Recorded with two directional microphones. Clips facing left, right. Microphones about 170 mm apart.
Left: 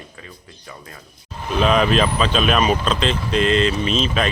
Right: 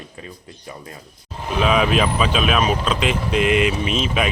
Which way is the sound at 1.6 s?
5° right (ahead or behind).